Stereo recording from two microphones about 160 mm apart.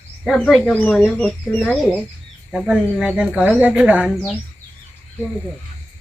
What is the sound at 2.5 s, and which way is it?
Speech, 5° right (ahead or behind).